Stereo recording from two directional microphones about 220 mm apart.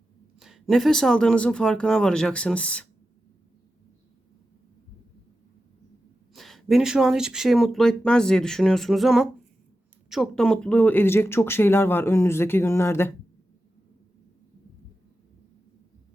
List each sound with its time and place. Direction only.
0.3 s speech: centre (ahead or behind)
6.3 s speech: centre (ahead or behind)